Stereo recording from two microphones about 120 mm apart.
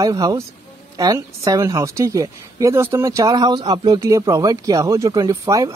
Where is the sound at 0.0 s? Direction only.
30° right (ahead or behind).